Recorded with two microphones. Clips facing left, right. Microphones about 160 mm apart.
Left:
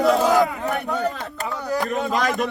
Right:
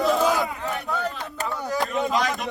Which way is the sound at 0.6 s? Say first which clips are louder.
Left 5 dB; 70° left (ahead or behind).